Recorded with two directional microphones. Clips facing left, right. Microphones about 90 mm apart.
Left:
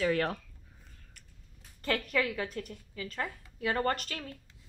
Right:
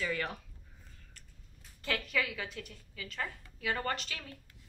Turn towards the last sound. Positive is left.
turn(degrees=40)  # may be behind; listen again after turning